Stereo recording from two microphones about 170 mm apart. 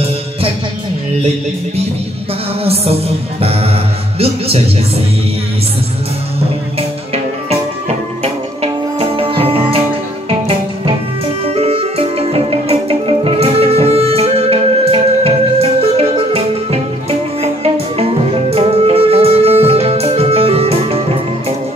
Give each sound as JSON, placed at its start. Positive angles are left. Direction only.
{"t": 2.6, "sound": "speech", "side_deg": -35}
{"t": 4.2, "sound": "speech", "side_deg": -35}
{"t": 9.0, "sound": "music", "side_deg": -30}
{"t": 11.5, "sound": "music", "side_deg": -35}
{"t": 18.5, "sound": "music", "side_deg": -35}